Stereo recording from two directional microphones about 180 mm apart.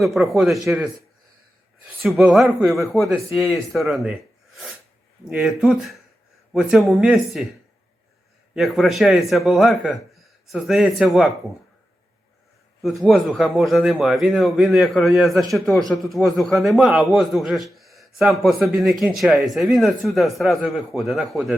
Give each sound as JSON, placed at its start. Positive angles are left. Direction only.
{"t": 0.0, "sound": "a man's voice", "side_deg": 0}
{"t": 8.5, "sound": "a man's voice", "side_deg": 0}
{"t": 12.8, "sound": "a man's voice", "side_deg": 0}